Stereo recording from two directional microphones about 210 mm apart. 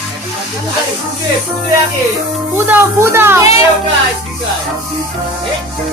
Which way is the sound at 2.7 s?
10° right (ahead or behind).